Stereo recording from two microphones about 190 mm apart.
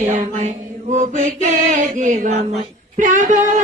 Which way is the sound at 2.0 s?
40° right (ahead or behind).